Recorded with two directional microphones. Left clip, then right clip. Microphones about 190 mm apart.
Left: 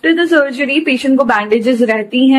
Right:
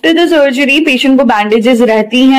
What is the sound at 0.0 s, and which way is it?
Speech, 25° right (ahead or behind).